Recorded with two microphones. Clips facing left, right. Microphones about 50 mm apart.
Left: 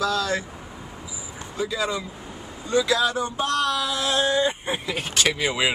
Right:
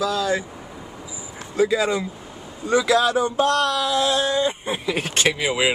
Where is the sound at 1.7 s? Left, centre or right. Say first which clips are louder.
Right 5 dB; right.